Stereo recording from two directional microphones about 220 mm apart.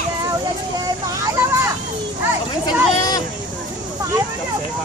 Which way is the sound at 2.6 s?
15° left (ahead or behind).